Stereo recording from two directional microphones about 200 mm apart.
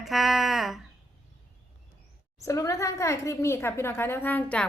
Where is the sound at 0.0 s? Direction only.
Centre (ahead or behind).